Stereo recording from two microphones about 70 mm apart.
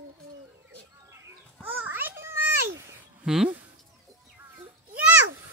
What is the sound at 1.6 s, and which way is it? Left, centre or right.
Babbling, right.